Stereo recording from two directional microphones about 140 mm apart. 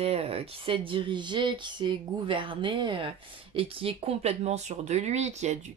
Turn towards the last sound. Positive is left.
turn(degrees=-55)  # may be behind; listen again after turning